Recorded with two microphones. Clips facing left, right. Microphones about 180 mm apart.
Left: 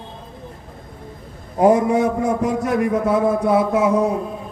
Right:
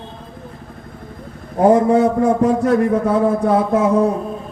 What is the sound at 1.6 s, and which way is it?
A man's voice, 15° left (ahead or behind).